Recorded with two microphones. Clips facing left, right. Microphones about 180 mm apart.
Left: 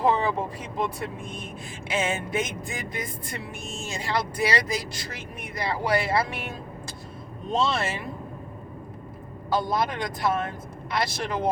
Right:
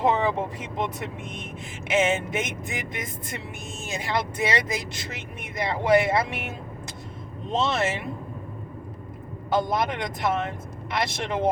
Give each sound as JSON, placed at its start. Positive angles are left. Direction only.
{"t": 0.0, "sound": "speech", "side_deg": -20}
{"t": 7.5, "sound": "speech", "side_deg": -20}
{"t": 9.5, "sound": "speech", "side_deg": -25}